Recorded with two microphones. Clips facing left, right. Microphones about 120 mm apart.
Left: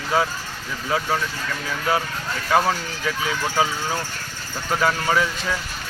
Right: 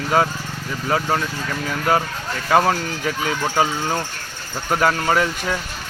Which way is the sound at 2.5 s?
45° right (ahead or behind).